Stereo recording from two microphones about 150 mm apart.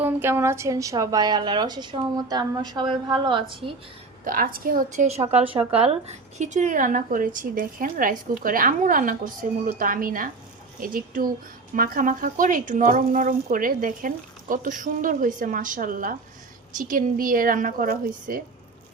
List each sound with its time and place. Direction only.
0.0 s a woman's voice: 15° right (ahead or behind); by 3.8 s 35° right (ahead or behind)
4.2 s a woman's voice: 65° right (ahead or behind)
5.0 s a woman's voice: 45° right (ahead or behind); by 18.4 s 70° right (ahead or behind)